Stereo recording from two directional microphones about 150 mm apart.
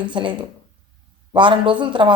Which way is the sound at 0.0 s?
30° right (ahead or behind).